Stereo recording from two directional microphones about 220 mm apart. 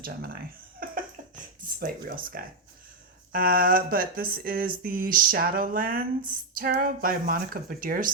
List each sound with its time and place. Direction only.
0.0 s speech: 45° right (ahead or behind)